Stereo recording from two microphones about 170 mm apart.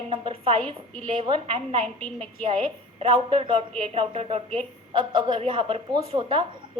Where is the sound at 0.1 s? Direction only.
30° right (ahead or behind).